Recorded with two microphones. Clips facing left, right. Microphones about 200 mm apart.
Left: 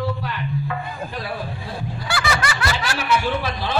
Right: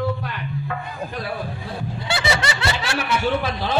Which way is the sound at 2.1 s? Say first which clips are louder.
Right 1 dB; 25° right (ahead or behind).